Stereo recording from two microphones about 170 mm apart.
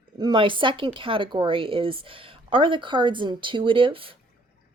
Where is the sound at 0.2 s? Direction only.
30° right (ahead or behind).